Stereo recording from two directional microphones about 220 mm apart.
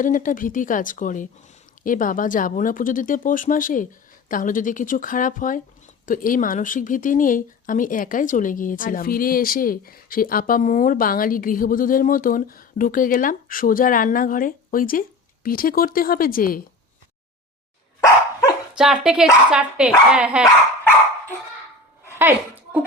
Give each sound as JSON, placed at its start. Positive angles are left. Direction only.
{"t": 0.0, "sound": "speech", "side_deg": 35}
{"t": 18.8, "sound": "speech", "side_deg": 0}